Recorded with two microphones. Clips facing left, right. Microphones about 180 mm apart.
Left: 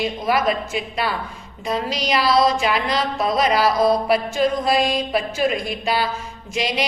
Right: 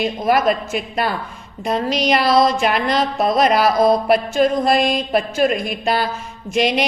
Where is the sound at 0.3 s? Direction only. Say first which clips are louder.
Right 4 dB; 50° right (ahead or behind).